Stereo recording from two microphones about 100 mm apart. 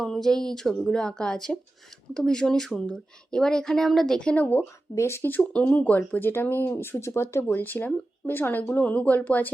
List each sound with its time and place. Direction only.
0.0 s a woman's voice: 5° left (ahead or behind)
4.9 s speech: 25° left (ahead or behind)